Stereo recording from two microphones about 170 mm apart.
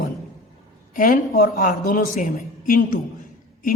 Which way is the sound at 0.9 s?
50° left (ahead or behind).